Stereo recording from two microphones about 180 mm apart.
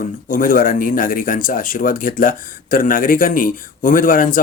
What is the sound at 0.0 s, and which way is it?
Speech, 50° left (ahead or behind).